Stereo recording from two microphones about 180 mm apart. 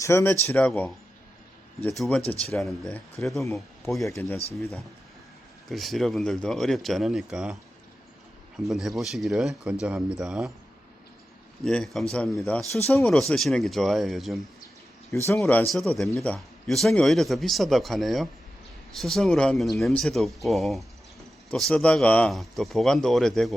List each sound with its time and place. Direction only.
0.0 s speech: 15° left (ahead or behind)
3.3 s speech: 15° left (ahead or behind)
3.8 s speech: centre (ahead or behind)
4.1 s speech: 10° left (ahead or behind)
8.5 s speech: centre (ahead or behind)
11.6 s speech: 5° left (ahead or behind)
15.3 s speech: 10° left (ahead or behind)
15.7 s speech: centre (ahead or behind)